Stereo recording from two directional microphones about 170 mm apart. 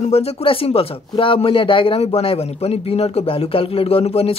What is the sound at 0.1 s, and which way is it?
Speech, 35° left (ahead or behind).